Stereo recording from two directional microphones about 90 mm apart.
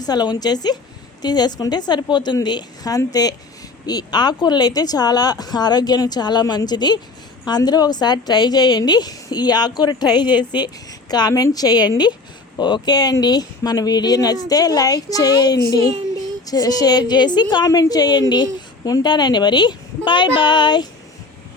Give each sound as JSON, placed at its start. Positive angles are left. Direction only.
{"t": 0.0, "sound": "a woman's voice", "side_deg": 50}